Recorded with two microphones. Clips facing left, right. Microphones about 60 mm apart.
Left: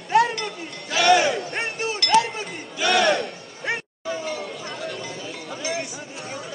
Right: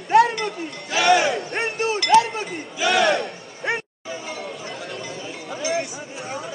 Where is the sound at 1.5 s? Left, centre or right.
Right.